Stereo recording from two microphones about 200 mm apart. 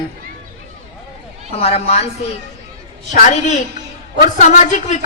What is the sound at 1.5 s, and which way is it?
Speech, 30° left (ahead or behind).